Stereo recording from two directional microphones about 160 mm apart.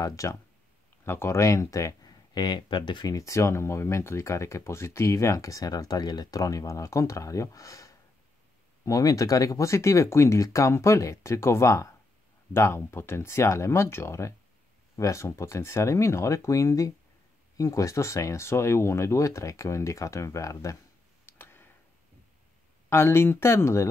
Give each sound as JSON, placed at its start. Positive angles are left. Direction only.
{"t": 0.0, "sound": "speech", "side_deg": 20}
{"t": 21.3, "sound": "a sound", "side_deg": 15}
{"t": 22.8, "sound": "speech", "side_deg": 15}